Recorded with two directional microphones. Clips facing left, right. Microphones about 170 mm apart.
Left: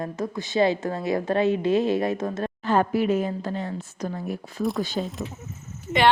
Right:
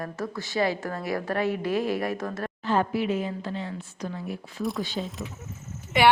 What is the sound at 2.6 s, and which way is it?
A woman's voice, 50° left (ahead or behind).